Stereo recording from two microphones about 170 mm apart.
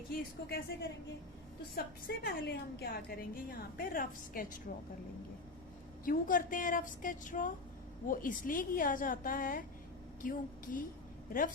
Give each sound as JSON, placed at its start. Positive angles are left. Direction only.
{"t": 0.2, "sound": "a woman's voice", "side_deg": 65}
{"t": 6.1, "sound": "a woman's voice", "side_deg": 55}